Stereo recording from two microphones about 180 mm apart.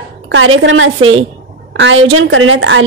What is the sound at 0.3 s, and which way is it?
Speech, 90° right.